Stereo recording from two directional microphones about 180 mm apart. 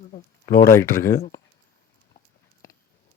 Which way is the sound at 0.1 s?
55° left (ahead or behind).